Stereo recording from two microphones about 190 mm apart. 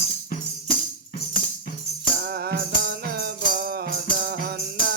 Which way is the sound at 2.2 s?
55° right (ahead or behind).